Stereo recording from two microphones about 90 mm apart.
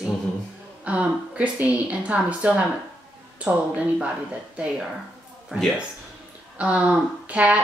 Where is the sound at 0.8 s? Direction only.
15° right (ahead or behind).